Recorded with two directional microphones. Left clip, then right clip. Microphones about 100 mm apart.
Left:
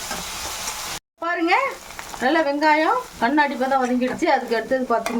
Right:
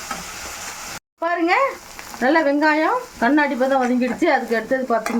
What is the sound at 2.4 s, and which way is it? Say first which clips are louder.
Frying: right 1 dB; 45° right (ahead or behind).